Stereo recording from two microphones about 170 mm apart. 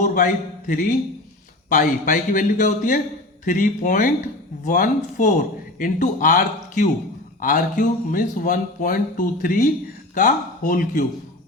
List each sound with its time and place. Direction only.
0.0 s a man's voice: 50° left (ahead or behind)